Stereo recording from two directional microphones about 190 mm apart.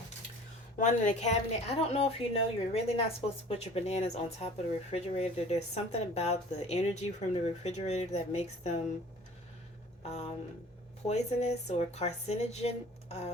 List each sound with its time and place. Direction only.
0.8 s speech: 40° left (ahead or behind)
10.0 s a sound: 35° left (ahead or behind)
11.0 s speech: 35° left (ahead or behind)